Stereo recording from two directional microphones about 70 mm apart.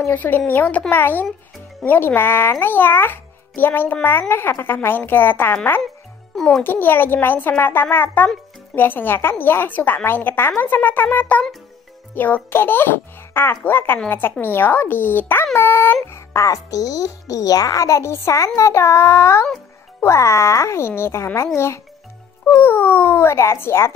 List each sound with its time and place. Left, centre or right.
0.1 s a child's voice: left
6.3 s a child's voice: centre
6.6 s a child's voice: left
16.1 s a child's voice: left